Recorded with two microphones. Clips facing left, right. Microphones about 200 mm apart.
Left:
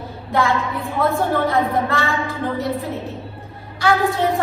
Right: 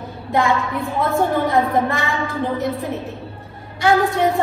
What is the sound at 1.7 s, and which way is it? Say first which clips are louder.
Speech: right 1 dB; 15° right (ahead or behind).